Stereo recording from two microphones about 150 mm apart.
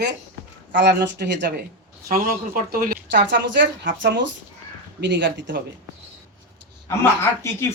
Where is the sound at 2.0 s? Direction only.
75° right (ahead or behind).